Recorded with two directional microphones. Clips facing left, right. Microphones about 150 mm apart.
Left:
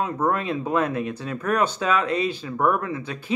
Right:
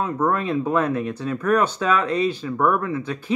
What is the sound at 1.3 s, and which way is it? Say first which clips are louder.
Speech: right 3 dB; 30° left (ahead or behind).